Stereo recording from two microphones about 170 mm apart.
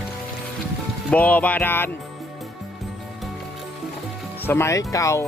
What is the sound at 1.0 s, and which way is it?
Music, 10° left (ahead or behind).